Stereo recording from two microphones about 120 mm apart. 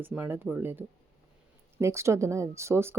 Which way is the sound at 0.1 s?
15° right (ahead or behind).